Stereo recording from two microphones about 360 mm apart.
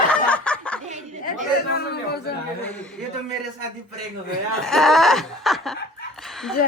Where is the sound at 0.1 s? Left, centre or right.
Centre.